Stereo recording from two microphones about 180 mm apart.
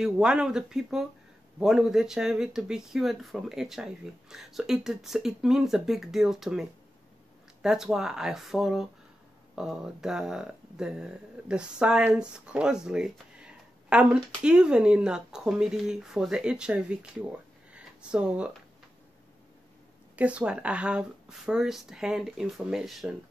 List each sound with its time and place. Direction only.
0.0 s speech: 5° right (ahead or behind)
17.7 s a sound: 5° right (ahead or behind)
20.2 s speech: 5° right (ahead or behind)